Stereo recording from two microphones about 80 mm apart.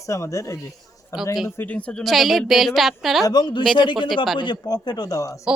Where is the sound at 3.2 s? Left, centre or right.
Left.